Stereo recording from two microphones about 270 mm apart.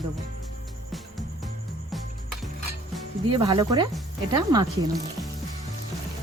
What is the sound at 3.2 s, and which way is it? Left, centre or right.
Speech, centre.